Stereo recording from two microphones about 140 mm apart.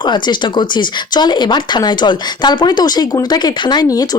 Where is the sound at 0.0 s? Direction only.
30° left (ahead or behind).